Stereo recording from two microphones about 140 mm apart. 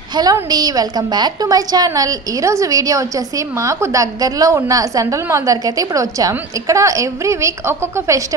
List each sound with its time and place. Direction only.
0.1 s a woman's voice: 30° right (ahead or behind)